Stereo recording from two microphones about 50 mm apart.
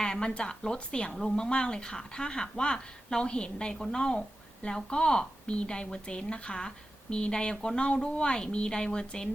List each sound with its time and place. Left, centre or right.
0.0 s a woman's voice: centre